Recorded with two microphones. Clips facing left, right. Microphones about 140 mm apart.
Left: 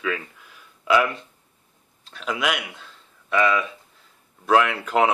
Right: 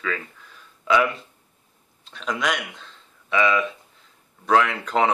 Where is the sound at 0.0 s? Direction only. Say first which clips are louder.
Left 2 dB; 10° left (ahead or behind).